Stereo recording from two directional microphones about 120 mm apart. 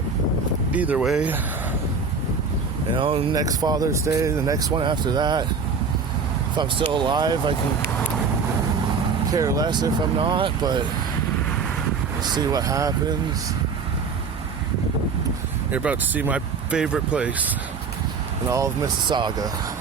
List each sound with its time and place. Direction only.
0.7 s speech: 10° right (ahead or behind)
2.9 s speech: 50° right (ahead or behind)
3.3 s speech: 30° right (ahead or behind)
6.9 s speech: 40° right (ahead or behind)
9.3 s speech: 30° right (ahead or behind)
12.2 s speech: 35° right (ahead or behind)
15.7 s speech: 10° right (ahead or behind)
18.4 s speech: 25° right (ahead or behind)
19.0 s speech: 40° right (ahead or behind)